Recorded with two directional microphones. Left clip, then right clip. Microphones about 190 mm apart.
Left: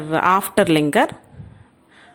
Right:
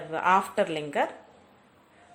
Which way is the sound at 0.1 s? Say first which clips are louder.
Left 7 dB; 35° left (ahead or behind).